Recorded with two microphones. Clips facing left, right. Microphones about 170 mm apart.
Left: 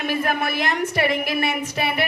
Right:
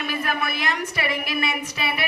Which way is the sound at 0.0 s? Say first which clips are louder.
Left 4 dB; 50° left (ahead or behind).